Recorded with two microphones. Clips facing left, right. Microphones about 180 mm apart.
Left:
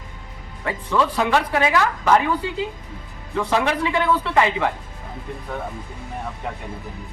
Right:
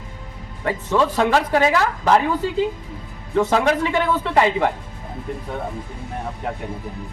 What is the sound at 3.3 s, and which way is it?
Speech, 40° right (ahead or behind).